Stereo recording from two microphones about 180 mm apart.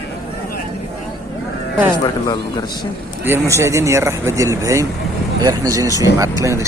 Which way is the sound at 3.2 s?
15° right (ahead or behind).